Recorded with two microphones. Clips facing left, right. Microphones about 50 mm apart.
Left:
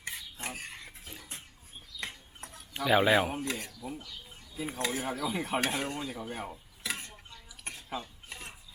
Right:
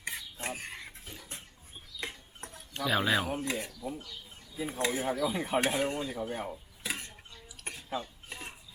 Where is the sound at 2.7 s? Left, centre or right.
Centre.